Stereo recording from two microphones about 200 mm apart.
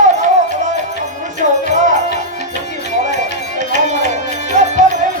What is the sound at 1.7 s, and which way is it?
Music, 40° right (ahead or behind).